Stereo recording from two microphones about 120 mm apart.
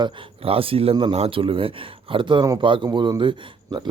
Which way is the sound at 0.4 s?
50° right (ahead or behind).